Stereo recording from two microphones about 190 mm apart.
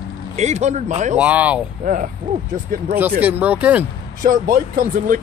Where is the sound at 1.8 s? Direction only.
45° right (ahead or behind).